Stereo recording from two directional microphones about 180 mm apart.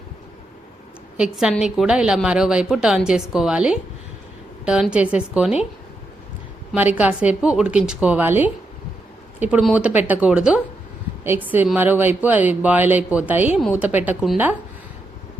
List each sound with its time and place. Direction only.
1.1 s a woman's voice: 5° right (ahead or behind)
6.7 s speech: 10° right (ahead or behind)